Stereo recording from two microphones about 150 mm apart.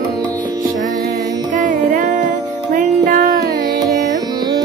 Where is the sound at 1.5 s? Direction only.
60° right (ahead or behind).